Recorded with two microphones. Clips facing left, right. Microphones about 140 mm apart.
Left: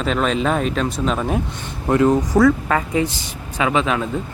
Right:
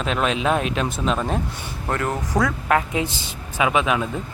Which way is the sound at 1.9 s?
15° left (ahead or behind).